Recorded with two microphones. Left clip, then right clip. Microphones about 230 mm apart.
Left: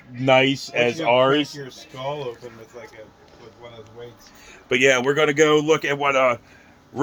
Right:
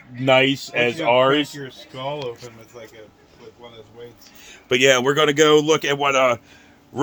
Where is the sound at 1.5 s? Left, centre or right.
Right.